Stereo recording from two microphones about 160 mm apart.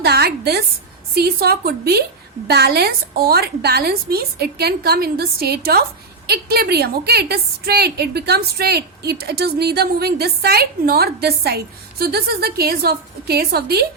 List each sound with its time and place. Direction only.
0.0 s a woman's voice: 85° right